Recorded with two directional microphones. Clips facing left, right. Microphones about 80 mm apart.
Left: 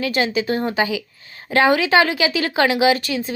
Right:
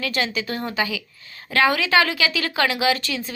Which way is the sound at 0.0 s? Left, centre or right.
Left.